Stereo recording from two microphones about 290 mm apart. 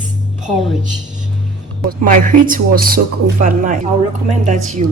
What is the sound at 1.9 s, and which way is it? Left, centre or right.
Speech, right.